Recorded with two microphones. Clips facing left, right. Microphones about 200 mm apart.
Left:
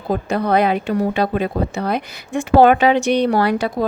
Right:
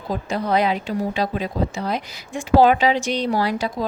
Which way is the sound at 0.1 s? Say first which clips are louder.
Left 4 dB; 60° left (ahead or behind).